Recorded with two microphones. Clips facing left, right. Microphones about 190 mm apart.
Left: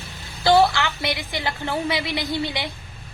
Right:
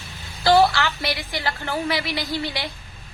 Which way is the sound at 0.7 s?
20° left (ahead or behind).